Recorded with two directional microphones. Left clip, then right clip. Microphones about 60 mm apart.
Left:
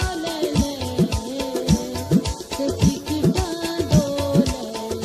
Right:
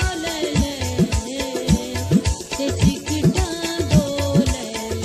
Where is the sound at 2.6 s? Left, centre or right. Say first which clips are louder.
Even; left.